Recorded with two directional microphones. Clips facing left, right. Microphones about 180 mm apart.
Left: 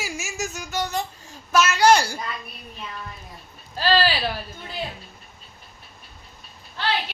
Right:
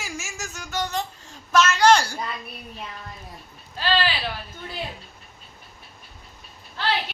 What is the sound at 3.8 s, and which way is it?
Speech, 40° left (ahead or behind).